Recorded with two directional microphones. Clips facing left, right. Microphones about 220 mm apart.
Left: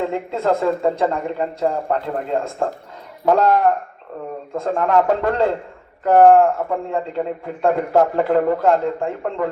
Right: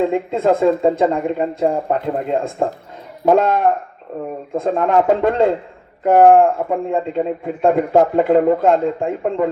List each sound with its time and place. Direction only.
0.0 s a man's voice: 20° right (ahead or behind)